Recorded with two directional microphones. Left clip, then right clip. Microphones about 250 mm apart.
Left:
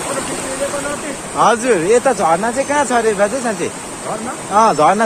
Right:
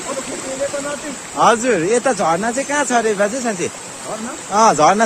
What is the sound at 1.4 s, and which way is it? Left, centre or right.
Speech, centre.